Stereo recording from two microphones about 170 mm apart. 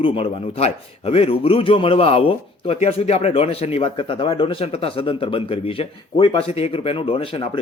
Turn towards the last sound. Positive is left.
turn(degrees=30)  # may be behind; listen again after turning